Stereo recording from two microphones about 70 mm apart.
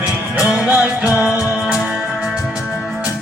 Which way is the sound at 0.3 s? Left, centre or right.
Centre.